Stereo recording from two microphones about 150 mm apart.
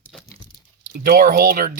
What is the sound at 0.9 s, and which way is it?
Speech, 80° right.